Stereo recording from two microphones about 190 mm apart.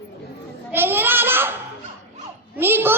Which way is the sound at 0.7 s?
10° right (ahead or behind).